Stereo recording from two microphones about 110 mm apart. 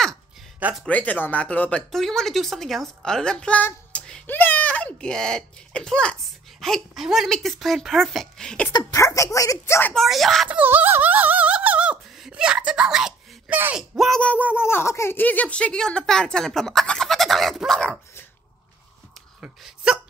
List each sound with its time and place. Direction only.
0.8 s speech: 15° left (ahead or behind)
3.6 s a sound: 10° left (ahead or behind)
4.3 s a child's voice: 15° left (ahead or behind)
8.9 s speech: 25° left (ahead or behind)
9.9 s speech: centre (ahead or behind)
10.5 s a sound: 15° right (ahead or behind)
13.7 s speech: centre (ahead or behind)
14.2 s speech: 15° left (ahead or behind)
19.4 s speech: 5° right (ahead or behind)